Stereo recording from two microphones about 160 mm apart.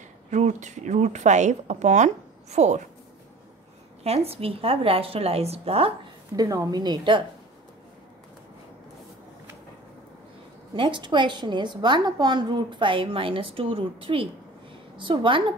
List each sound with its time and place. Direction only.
0.3 s a woman's voice: 45° right (ahead or behind)
4.0 s a woman's voice: 40° right (ahead or behind)
6.3 s a woman's voice: 20° right (ahead or behind)
10.8 s a woman's voice: 30° right (ahead or behind)